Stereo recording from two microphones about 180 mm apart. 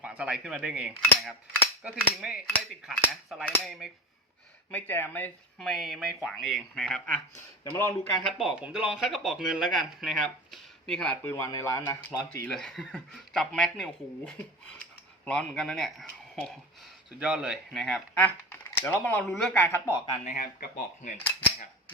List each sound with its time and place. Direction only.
0.0 s speech: 5° right (ahead or behind)
1.0 s cutlery: 5° left (ahead or behind)
1.8 s speech: 5° right (ahead or behind)
4.7 s speech: 10° left (ahead or behind)
5.5 s speech: centre (ahead or behind)
7.3 s speech: 15° left (ahead or behind)
8.3 s speech: centre (ahead or behind); by 20.1 s 15° left (ahead or behind)
20.2 s speech: 50° left (ahead or behind)